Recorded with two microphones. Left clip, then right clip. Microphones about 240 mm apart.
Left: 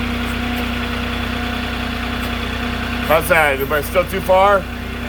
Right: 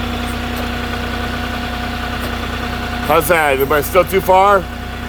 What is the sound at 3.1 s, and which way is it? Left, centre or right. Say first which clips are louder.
Speech: right 1 dB; right.